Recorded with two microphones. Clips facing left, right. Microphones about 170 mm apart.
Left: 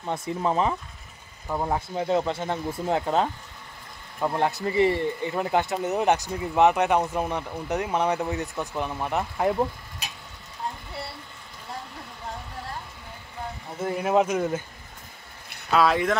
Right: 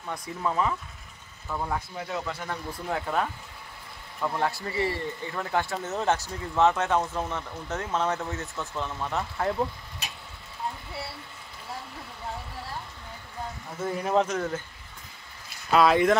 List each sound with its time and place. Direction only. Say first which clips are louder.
0.0 s speech: left 4 dB; 25° left (ahead or behind)
10.9 s vehicle: left 1 dB; 5° right (ahead or behind)
13.8 s speech: left 3 dB; 10° left (ahead or behind)
15.7 s speech: right 1 dB; centre (ahead or behind)